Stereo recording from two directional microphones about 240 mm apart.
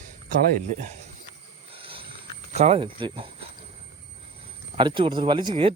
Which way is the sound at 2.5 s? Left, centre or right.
Right.